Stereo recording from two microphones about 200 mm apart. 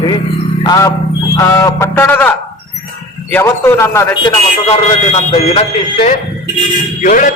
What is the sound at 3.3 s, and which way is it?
A man's voice, 10° left (ahead or behind).